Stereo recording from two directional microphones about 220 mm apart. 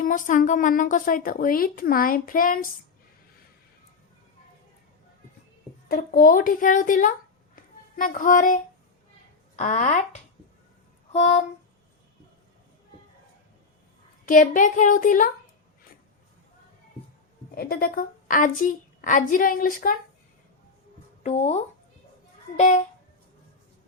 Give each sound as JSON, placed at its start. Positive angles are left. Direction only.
{"t": 0.0, "sound": "a woman's voice", "side_deg": 35}
{"t": 5.9, "sound": "a woman's voice", "side_deg": 40}
{"t": 11.1, "sound": "speech", "side_deg": 25}
{"t": 14.3, "sound": "a woman's voice", "side_deg": 40}
{"t": 17.5, "sound": "a woman's voice", "side_deg": 45}
{"t": 21.2, "sound": "a woman's voice", "side_deg": 30}